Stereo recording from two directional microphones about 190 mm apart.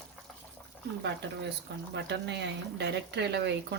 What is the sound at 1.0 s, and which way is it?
Speech, 65° right (ahead or behind).